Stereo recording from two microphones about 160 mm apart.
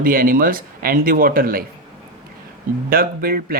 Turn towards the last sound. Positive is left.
turn(degrees=-70)  # may be behind; listen again after turning